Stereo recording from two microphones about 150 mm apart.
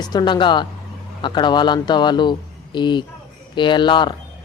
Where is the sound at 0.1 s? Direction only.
30° left (ahead or behind).